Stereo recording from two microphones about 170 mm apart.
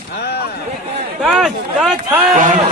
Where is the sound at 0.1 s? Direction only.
75° left (ahead or behind).